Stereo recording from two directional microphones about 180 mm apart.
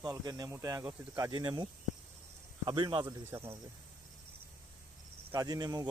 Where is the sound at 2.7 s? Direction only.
25° right (ahead or behind).